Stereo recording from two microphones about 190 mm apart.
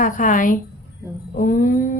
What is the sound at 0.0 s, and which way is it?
A woman's voice, 45° left (ahead or behind).